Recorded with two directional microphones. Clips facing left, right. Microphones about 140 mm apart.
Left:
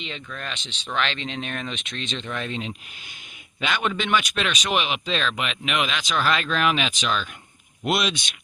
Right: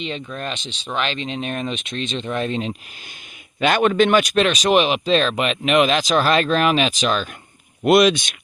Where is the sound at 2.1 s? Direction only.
15° right (ahead or behind).